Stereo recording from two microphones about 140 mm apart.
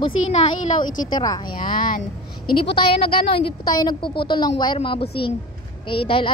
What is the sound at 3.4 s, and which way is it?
A woman's voice, 30° left (ahead or behind).